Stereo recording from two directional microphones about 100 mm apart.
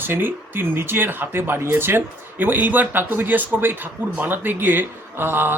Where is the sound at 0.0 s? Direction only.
20° right (ahead or behind).